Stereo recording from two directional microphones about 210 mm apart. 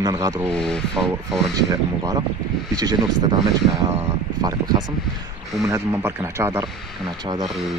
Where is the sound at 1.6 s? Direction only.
20° right (ahead or behind).